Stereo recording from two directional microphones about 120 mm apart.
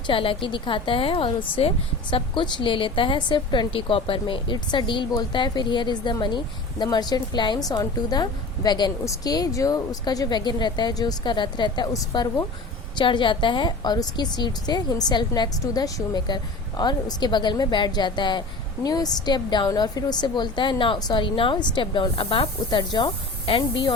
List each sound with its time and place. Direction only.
0.1 s a woman's voice: 45° left (ahead or behind); by 12.5 s 30° left (ahead or behind)
13.0 s a woman's voice: 45° left (ahead or behind)
22.8 s speech: 40° left (ahead or behind)